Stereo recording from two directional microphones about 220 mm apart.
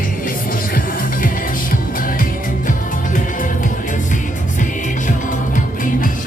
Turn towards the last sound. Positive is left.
turn(degrees=35)  # may be behind; listen again after turning